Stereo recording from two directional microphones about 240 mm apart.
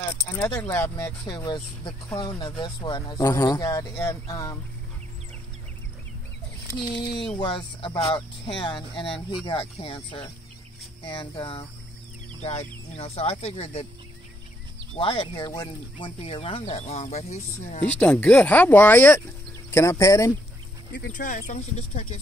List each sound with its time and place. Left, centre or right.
0.1 s speech: centre
6.9 s speech: centre
15.0 s speech: left
17.9 s speech: centre
20.9 s speech: left